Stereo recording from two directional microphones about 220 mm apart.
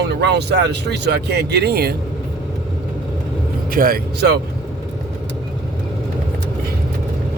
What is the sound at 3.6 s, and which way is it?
Speech, 40° right (ahead or behind).